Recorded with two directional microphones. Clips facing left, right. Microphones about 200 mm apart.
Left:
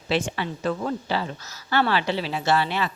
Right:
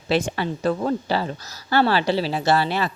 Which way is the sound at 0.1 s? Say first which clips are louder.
Right 3 dB; 40° right (ahead or behind).